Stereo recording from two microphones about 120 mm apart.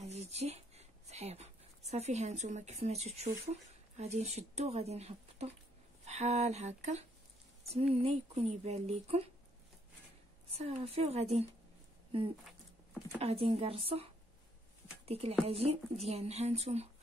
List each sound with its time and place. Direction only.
0.0 s a sound: 65° right (ahead or behind)
3.9 s speech: 65° right (ahead or behind)
10.5 s speech: 60° right (ahead or behind)
13.2 s speech: 60° right (ahead or behind)
15.0 s a woman's voice: 55° right (ahead or behind)